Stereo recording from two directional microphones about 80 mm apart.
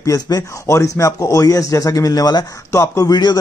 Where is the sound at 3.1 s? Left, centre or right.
Left.